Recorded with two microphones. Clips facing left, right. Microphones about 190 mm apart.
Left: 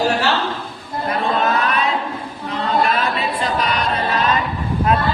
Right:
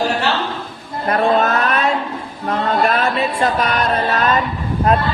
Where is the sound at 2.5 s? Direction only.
50° right (ahead or behind).